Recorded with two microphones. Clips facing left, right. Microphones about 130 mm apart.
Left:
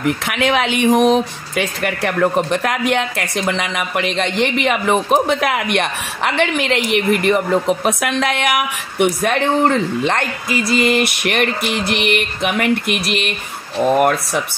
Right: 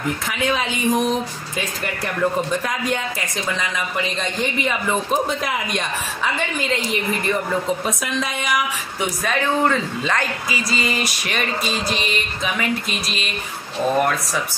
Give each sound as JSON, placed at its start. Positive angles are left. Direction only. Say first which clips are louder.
{"t": 0.0, "sound": "speech", "louder": "left 5 dB", "side_deg": 75}